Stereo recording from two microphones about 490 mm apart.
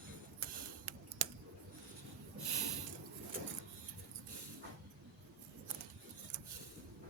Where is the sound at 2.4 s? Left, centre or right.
Right.